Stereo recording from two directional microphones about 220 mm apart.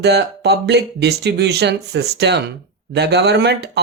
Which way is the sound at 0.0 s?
50° right (ahead or behind).